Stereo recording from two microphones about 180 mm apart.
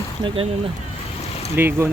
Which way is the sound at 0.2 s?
30° right (ahead or behind).